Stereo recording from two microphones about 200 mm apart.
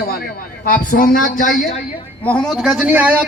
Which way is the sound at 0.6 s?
45° left (ahead or behind).